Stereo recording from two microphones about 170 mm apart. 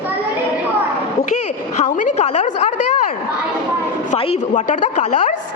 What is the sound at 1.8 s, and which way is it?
A woman's voice, 45° left (ahead or behind).